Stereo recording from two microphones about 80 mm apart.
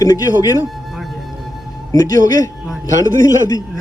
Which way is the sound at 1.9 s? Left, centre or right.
Left.